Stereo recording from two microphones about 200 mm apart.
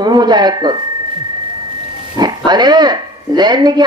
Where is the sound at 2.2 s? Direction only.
20° right (ahead or behind).